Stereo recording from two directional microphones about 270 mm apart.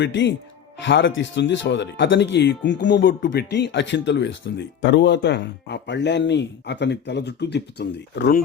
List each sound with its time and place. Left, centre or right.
0.0 s speech: left